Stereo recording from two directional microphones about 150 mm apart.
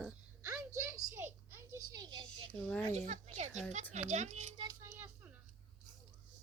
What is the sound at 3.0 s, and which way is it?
A woman's voice, 50° right (ahead or behind).